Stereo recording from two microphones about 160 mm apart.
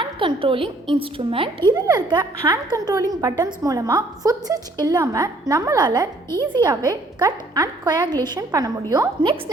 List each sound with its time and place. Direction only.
0.0 s a woman's voice: 30° right (ahead or behind)